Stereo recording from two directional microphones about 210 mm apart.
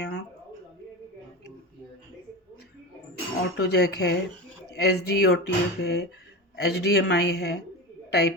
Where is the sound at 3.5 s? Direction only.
50° left (ahead or behind).